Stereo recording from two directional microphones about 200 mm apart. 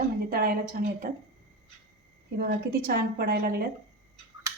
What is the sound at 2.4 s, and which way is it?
A woman's voice, 45° right (ahead or behind).